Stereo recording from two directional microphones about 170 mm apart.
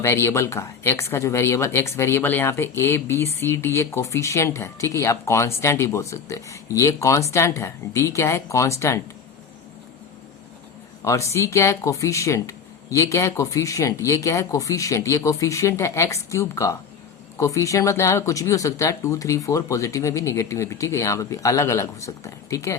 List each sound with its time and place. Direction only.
0.0 s speech: 15° left (ahead or behind)
11.0 s speech: 20° left (ahead or behind)